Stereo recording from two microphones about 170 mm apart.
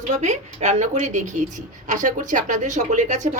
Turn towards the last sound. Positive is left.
turn(degrees=-45)  # may be behind; listen again after turning